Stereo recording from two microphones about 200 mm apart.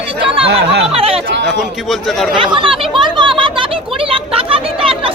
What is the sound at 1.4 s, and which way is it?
Speech, centre (ahead or behind).